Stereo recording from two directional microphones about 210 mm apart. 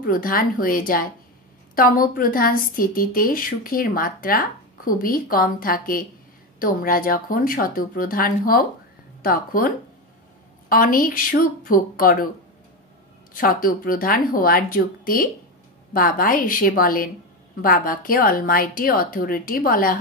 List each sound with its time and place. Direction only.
0.0 s a woman's voice: 40° left (ahead or behind)
13.3 s a woman's voice: 40° left (ahead or behind)